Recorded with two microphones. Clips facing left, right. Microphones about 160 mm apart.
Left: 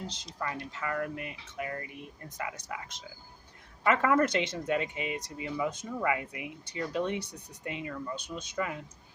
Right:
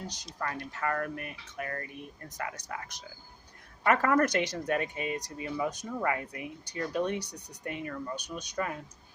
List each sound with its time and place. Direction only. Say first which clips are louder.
0.0 s speech: even; 25° left (ahead or behind)